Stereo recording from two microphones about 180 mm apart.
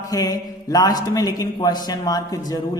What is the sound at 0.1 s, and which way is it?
Mantra, 20° left (ahead or behind).